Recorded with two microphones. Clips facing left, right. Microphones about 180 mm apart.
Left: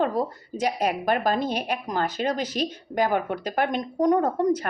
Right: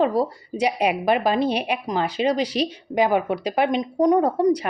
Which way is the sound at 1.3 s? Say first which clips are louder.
Right 4 dB; 85° right.